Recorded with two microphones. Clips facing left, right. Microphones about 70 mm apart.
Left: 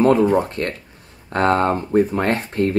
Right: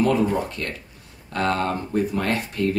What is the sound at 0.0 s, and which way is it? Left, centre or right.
Speech, left.